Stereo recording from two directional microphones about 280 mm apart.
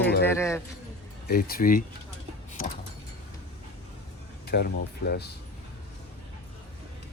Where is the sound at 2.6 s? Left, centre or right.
Left.